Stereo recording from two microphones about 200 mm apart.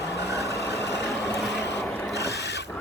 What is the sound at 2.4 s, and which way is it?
Filing, 55° left (ahead or behind).